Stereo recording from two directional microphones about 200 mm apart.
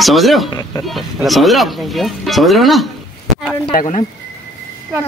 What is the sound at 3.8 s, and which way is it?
Speech, 35° left (ahead or behind).